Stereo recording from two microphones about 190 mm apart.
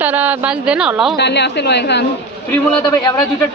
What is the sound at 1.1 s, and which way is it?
Speech, 65° left (ahead or behind).